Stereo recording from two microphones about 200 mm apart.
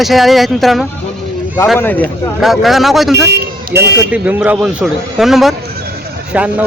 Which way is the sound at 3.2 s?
55° right (ahead or behind).